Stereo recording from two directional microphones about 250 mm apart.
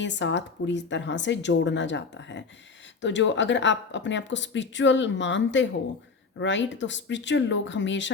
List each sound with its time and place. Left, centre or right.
0.0 s speech: left